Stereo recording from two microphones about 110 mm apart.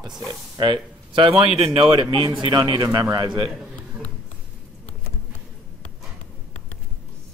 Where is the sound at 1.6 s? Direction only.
55° right (ahead or behind).